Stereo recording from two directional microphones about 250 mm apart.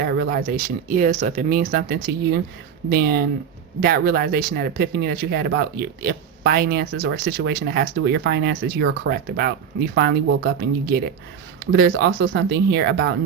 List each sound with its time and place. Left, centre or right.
0.0 s speech: right